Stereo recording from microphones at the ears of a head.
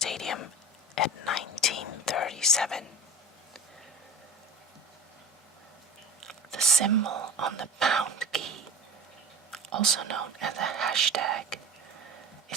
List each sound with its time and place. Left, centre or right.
0.0 s whispering: left
6.8 s speech: right
9.6 s speech: right